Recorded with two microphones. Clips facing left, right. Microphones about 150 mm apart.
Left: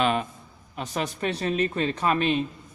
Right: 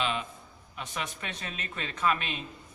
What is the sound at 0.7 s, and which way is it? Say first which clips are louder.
A man's voice: left 8 dB; 40° left (ahead or behind).